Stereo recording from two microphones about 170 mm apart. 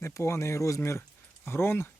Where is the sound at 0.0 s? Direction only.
15° left (ahead or behind).